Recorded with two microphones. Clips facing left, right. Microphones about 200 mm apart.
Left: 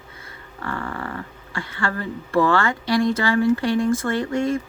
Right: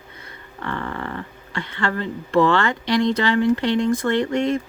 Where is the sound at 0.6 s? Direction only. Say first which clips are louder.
Right 1 dB; 40° left (ahead or behind).